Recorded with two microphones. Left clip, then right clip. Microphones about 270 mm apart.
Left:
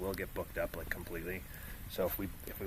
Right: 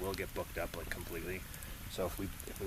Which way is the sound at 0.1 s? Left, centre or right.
Left.